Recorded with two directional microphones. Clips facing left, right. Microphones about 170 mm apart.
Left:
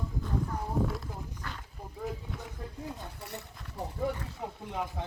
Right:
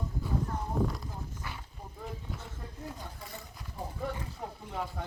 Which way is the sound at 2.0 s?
Centre (ahead or behind).